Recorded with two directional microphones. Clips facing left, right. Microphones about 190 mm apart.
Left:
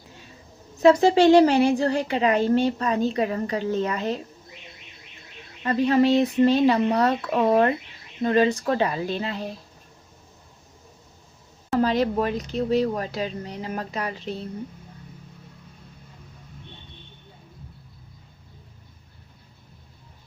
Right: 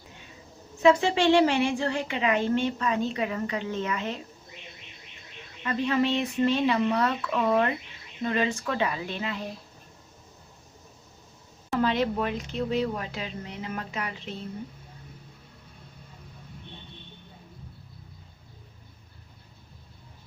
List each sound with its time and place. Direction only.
0.8 s a woman's voice: 40° left (ahead or behind)
5.6 s a woman's voice: 40° left (ahead or behind)
11.7 s a woman's voice: 40° left (ahead or behind)